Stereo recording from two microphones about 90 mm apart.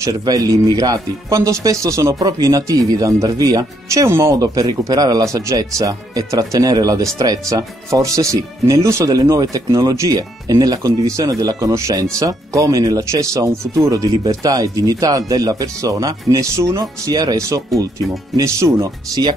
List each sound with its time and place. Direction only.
0.0 s speech: 45° right (ahead or behind)
17.0 s speech: 45° right (ahead or behind)